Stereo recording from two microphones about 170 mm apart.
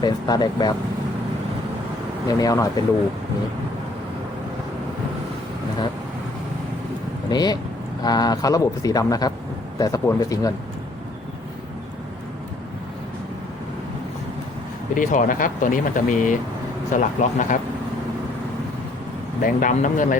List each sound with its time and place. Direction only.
0.0 s speech: 25° left (ahead or behind)
2.2 s speech: 20° left (ahead or behind)
7.3 s speech: 25° left (ahead or behind)
14.9 s speech: 50° left (ahead or behind)
19.4 s speech: 50° left (ahead or behind)